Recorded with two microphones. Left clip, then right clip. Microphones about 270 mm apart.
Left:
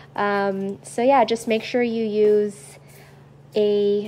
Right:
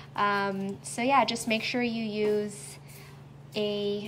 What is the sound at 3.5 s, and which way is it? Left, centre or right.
Speech, right.